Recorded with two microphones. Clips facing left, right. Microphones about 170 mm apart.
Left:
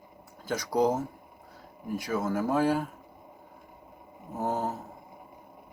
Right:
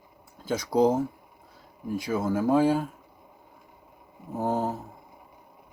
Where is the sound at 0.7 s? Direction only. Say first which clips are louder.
Right 4 dB; 10° right (ahead or behind).